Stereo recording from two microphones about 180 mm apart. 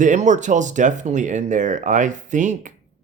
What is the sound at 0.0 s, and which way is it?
Speech, 45° right (ahead or behind).